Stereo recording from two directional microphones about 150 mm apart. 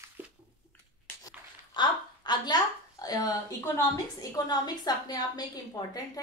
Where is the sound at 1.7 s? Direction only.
30° left (ahead or behind).